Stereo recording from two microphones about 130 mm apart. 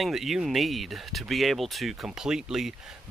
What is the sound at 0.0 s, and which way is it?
Speech, centre (ahead or behind).